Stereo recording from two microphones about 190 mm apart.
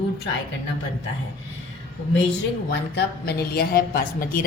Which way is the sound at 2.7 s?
60° left (ahead or behind).